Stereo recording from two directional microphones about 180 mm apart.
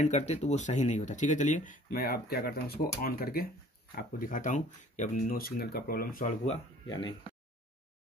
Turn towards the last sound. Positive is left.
turn(degrees=25)  # may be behind; listen again after turning